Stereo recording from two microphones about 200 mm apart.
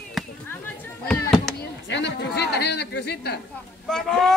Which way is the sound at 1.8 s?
60° left (ahead or behind).